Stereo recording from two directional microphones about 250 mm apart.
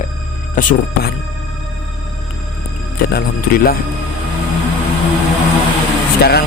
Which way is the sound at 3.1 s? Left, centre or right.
Left.